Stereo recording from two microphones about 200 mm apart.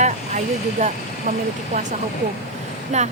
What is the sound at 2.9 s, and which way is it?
Speech, 35° right (ahead or behind).